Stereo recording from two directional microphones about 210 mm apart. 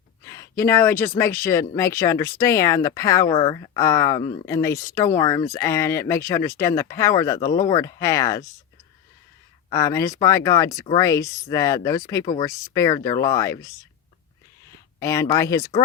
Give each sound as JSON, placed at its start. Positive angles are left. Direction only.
{"t": 0.3, "sound": "speech", "side_deg": 15}
{"t": 9.6, "sound": "speech", "side_deg": 15}
{"t": 14.9, "sound": "speech", "side_deg": 15}